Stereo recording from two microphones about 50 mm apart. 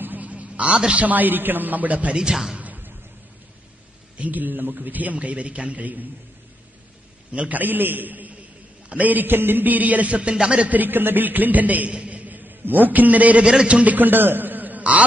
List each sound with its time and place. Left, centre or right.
0.0 s a sound: right; by 1.0 s centre
1.0 s a man's voice: right
2.1 s a man's voice: centre
2.5 s a sound: right
4.2 s a man's voice: right
7.3 s a man's voice: right
10.7 s a man's voice: right
13.5 s a man's voice: centre
13.8 s a man's voice: right